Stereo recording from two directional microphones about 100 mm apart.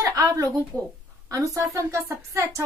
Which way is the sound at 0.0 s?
35° right (ahead or behind).